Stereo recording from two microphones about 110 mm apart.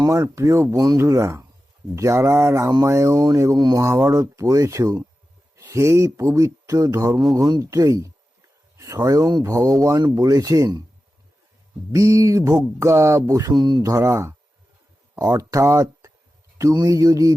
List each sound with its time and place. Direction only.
0.0 s speech: 30° right (ahead or behind)
11.9 s speech: 30° right (ahead or behind)